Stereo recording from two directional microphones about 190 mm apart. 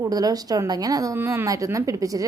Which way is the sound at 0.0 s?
20° right (ahead or behind).